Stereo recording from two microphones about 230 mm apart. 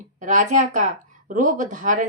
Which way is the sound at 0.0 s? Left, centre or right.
Right.